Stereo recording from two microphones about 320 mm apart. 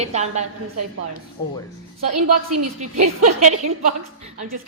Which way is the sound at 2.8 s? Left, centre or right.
Right.